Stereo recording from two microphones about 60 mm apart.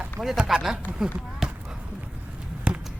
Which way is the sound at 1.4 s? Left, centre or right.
Centre.